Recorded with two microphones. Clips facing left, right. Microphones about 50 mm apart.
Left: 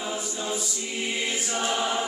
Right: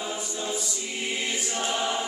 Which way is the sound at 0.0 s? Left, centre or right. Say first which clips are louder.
Left 1 dB; centre.